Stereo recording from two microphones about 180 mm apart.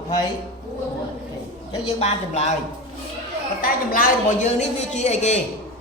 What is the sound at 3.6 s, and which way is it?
Speech, 50° left (ahead or behind).